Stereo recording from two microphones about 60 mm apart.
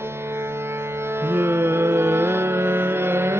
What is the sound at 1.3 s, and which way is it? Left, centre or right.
Music, right.